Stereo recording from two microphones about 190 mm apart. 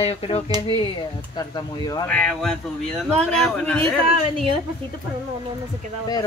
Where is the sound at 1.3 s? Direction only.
20° left (ahead or behind).